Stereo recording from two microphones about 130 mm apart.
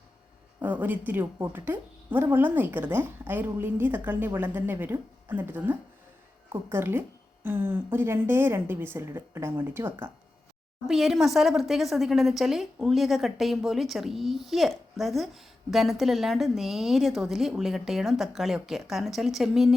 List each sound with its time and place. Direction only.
0.6 s a woman's voice: 15° right (ahead or behind)
10.8 s speech: 5° right (ahead or behind)